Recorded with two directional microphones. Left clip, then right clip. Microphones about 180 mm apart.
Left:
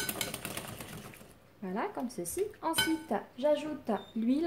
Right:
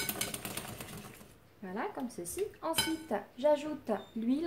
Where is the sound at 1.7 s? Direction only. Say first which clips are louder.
Left 2 dB; 35° left (ahead or behind).